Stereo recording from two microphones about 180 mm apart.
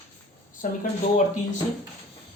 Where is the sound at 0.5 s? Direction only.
45° left (ahead or behind).